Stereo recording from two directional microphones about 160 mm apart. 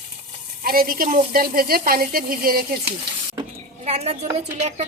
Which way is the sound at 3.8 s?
40° right (ahead or behind).